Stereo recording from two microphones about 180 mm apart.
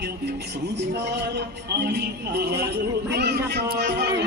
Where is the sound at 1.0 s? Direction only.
65° right (ahead or behind).